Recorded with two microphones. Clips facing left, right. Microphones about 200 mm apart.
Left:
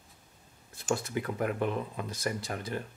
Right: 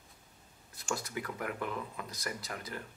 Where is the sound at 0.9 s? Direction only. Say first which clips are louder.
Left 6 dB; 25° left (ahead or behind).